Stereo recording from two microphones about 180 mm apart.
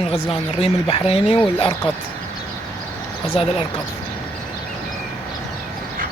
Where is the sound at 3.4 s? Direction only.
30° left (ahead or behind).